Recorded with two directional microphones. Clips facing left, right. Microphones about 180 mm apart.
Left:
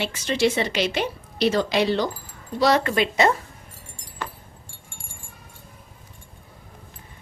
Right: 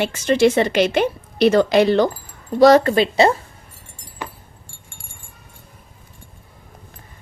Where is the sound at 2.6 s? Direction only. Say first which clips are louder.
Right 8 dB; 40° right (ahead or behind).